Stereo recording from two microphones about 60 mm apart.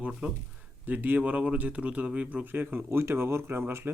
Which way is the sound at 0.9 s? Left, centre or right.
Right.